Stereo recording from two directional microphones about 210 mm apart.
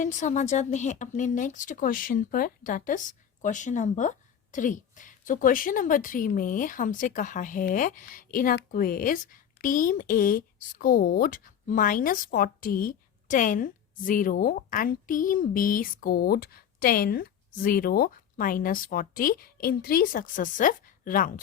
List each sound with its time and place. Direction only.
0.0 s a woman's voice: 35° left (ahead or behind)